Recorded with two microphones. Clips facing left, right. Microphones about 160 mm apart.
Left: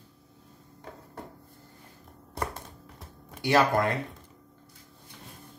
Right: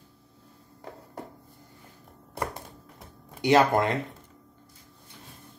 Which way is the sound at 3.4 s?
20° right (ahead or behind).